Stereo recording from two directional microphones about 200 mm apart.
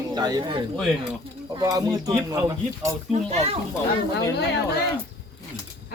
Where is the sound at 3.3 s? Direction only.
30° right (ahead or behind).